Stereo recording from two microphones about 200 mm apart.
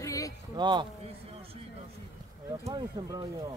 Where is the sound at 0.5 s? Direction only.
20° right (ahead or behind).